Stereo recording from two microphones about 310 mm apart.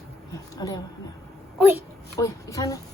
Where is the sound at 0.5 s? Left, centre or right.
Centre.